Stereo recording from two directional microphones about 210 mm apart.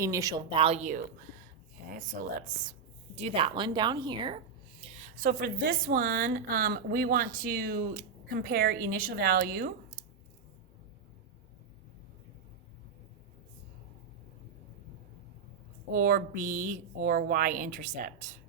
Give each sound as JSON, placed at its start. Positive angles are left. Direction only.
{"t": 0.0, "sound": "speech", "side_deg": -15}
{"t": 3.2, "sound": "a woman's voice", "side_deg": -30}
{"t": 15.9, "sound": "a woman's voice", "side_deg": -45}